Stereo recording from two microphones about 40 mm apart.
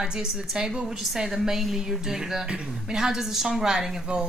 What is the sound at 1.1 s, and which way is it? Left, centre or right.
Speech, centre.